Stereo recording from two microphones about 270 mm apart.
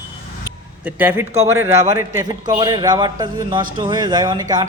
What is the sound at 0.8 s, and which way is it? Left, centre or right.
A man's voice, centre.